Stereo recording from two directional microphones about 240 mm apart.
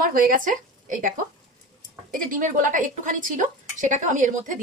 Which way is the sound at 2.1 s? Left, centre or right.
Right.